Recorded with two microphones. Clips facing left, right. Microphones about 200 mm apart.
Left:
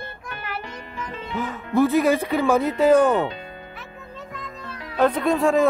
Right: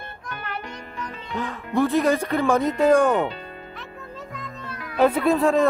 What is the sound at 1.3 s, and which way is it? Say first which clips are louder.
Speech: left 2 dB; 5° left (ahead or behind).